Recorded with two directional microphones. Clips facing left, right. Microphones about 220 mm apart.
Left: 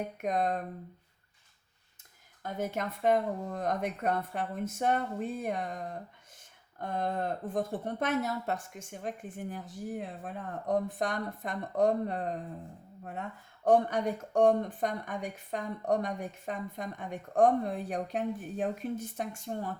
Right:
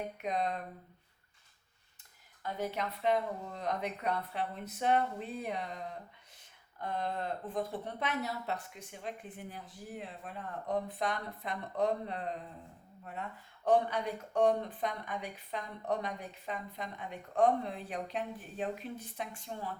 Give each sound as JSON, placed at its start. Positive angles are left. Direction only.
{"t": 0.2, "sound": "speech", "side_deg": 50}
{"t": 2.4, "sound": "speech", "side_deg": 50}
{"t": 13.7, "sound": "speech", "side_deg": 45}